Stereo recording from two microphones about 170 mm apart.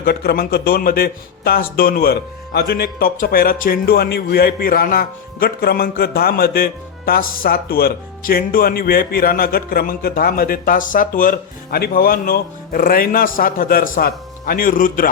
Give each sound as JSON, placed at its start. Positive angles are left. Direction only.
{"t": 0.0, "sound": "speech", "side_deg": 65}